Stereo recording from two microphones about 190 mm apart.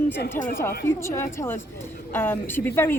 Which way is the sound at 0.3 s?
45° left (ahead or behind).